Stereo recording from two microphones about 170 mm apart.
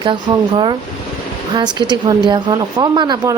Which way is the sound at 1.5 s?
25° right (ahead or behind).